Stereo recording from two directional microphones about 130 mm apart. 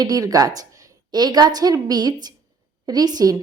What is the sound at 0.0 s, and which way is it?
A woman's voice, 30° right (ahead or behind).